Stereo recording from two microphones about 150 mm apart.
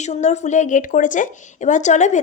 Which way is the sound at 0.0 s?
50° left (ahead or behind).